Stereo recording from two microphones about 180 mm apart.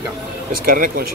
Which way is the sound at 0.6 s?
50° right (ahead or behind).